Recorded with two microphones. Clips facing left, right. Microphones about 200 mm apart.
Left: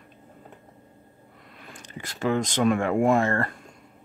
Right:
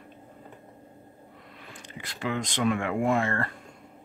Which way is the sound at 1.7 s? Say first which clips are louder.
Left 3 dB; 45° left (ahead or behind).